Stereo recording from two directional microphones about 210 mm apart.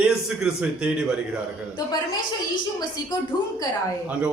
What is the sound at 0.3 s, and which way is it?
Speech, 5° right (ahead or behind).